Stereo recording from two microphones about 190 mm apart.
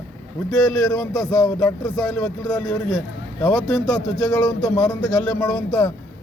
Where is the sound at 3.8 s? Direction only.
15° left (ahead or behind).